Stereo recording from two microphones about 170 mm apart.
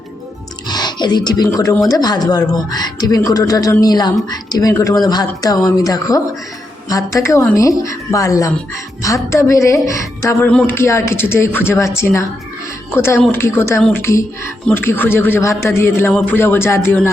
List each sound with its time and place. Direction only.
0.7 s speech: 25° left (ahead or behind)
10.5 s speech: 5° left (ahead or behind)
10.8 s a man's voice: 15° left (ahead or behind)